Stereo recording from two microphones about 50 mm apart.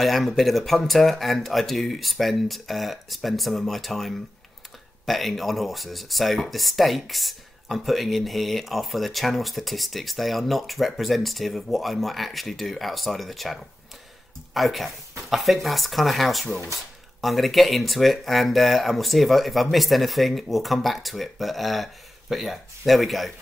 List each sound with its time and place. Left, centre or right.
0.0 s speech: centre